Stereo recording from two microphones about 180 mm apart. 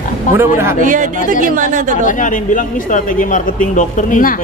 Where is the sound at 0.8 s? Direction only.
45° right (ahead or behind).